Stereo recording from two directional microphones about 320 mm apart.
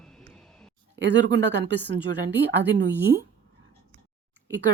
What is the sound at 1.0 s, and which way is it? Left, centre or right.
Speech, right.